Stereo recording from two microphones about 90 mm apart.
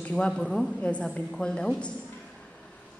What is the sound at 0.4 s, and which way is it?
A woman's voice, 5° left (ahead or behind).